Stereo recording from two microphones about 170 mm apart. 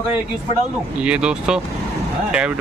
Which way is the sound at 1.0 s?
5° right (ahead or behind).